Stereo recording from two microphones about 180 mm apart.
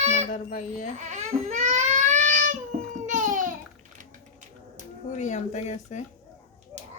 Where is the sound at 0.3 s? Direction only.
45° left (ahead or behind).